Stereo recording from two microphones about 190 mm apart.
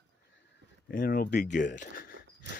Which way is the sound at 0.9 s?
50° left (ahead or behind).